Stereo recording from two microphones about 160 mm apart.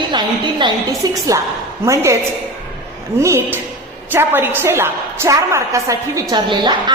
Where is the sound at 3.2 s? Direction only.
20° right (ahead or behind).